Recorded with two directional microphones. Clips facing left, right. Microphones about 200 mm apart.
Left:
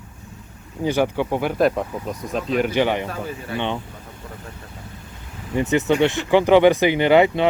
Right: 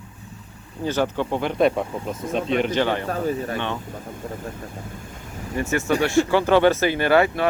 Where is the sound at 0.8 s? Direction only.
15° left (ahead or behind).